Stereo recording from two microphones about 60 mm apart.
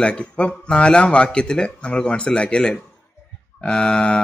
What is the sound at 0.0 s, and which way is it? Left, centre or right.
Speech, centre.